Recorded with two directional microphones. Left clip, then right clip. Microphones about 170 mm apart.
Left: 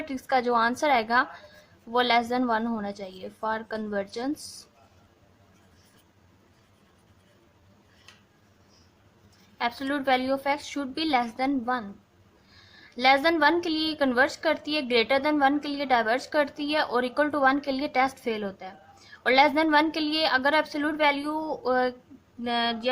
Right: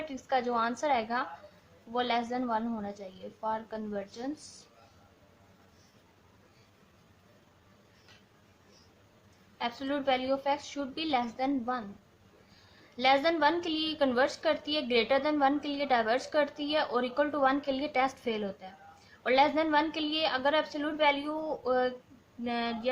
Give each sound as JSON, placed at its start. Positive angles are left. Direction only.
{"t": 0.1, "sound": "a woman's voice", "side_deg": 25}
{"t": 9.6, "sound": "a woman's voice", "side_deg": 25}
{"t": 13.0, "sound": "a woman's voice", "side_deg": 20}